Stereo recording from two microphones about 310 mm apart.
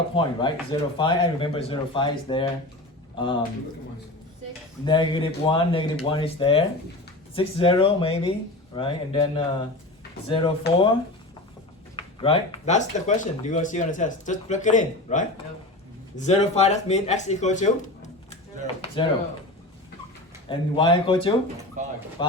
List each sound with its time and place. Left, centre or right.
0.1 s speech: centre
4.9 s speech: centre
11.9 s speech: centre
20.5 s speech: centre
21.8 s speech: right
22.2 s speech: centre